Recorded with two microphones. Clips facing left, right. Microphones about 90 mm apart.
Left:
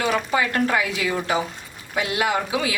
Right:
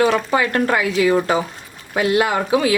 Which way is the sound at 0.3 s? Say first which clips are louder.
Right 3 dB; 45° right (ahead or behind).